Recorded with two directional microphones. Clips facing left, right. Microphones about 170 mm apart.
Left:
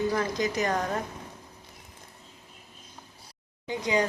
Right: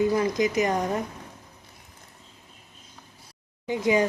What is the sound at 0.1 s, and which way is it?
Speech, 15° right (ahead or behind).